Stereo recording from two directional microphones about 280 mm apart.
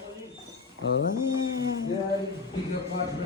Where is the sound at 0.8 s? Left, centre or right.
Left.